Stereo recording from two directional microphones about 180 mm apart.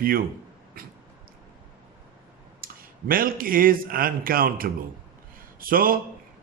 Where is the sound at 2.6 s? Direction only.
50° right (ahead or behind).